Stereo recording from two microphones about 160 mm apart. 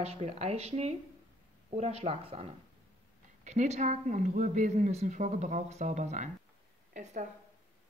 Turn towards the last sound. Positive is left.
turn(degrees=-50)  # may be behind; listen again after turning